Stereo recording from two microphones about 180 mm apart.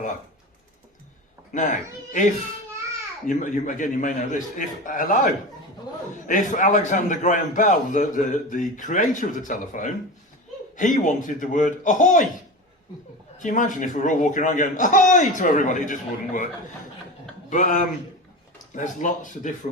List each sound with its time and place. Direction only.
1.5 s a man's voice: 45° left (ahead or behind)
3.2 s a man's voice: 45° left (ahead or behind)
13.4 s a man's voice: 45° left (ahead or behind)
17.5 s a man's voice: 45° left (ahead or behind)